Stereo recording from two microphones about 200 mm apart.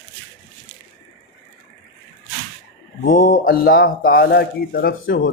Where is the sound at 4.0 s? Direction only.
45° left (ahead or behind).